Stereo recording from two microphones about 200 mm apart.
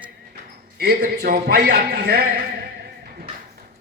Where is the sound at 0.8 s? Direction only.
50° right (ahead or behind).